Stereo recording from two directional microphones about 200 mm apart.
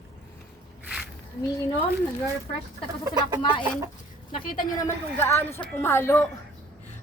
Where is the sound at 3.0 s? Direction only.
20° right (ahead or behind).